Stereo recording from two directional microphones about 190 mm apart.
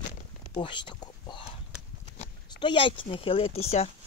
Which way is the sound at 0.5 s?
25° left (ahead or behind).